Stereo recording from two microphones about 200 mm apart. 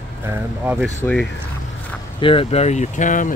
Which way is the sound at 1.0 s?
5° left (ahead or behind).